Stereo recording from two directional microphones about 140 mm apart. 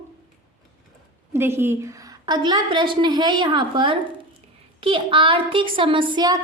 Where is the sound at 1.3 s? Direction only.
15° right (ahead or behind).